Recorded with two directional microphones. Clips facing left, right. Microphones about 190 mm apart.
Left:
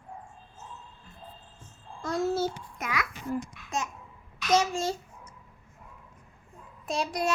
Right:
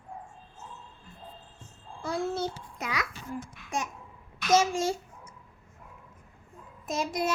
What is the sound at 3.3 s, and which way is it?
Babbling, 10° right (ahead or behind).